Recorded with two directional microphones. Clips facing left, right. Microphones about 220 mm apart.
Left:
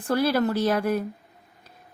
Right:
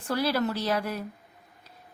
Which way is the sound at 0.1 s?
50° left (ahead or behind).